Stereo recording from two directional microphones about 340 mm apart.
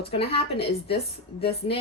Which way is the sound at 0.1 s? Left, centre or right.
Centre.